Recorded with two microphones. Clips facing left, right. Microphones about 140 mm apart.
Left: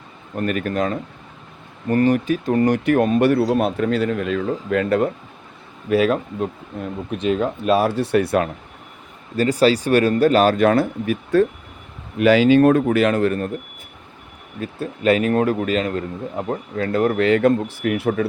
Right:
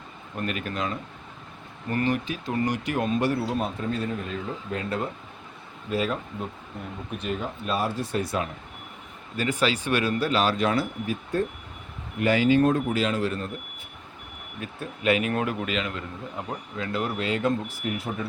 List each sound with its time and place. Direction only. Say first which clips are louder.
0.3 s speech: left 9 dB; 50° left (ahead or behind)
3.5 s speech: left 9 dB; 80° left
5.9 s speech: left 10 dB; 85° left; by 8.4 s 65° left (ahead or behind)
9.3 s speech: left 9 dB; 40° left (ahead or behind); by 11.4 s 80° left
12.1 s speech: left 7 dB; 90° left; by 13.5 s 55° left (ahead or behind)
14.6 s speech: left 7 dB; 35° left (ahead or behind); by 17.5 s 65° left (ahead or behind)
17.8 s speech: left 12 dB; 75° left (ahead or behind)